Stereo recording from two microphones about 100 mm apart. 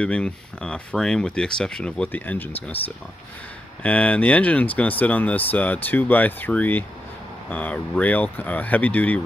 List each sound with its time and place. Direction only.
0.0 s speech: 10° left (ahead or behind)